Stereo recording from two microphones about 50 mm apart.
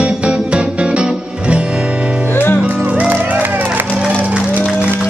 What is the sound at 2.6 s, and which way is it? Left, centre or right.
Music, right.